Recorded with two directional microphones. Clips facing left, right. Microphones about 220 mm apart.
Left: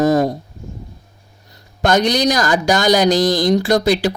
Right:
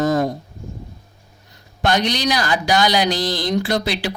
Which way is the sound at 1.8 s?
45° left (ahead or behind).